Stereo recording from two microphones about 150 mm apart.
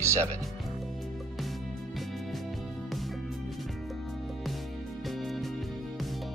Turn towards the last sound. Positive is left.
turn(degrees=0)  # may be behind; listen again after turning